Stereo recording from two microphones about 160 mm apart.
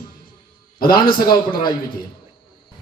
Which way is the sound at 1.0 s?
65° left (ahead or behind).